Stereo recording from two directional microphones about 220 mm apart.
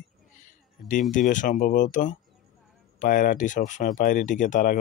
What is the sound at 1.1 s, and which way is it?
Speech, 35° left (ahead or behind).